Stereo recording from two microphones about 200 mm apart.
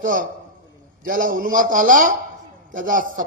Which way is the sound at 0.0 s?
40° right (ahead or behind).